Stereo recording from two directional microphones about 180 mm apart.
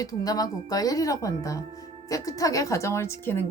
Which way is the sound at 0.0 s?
20° left (ahead or behind).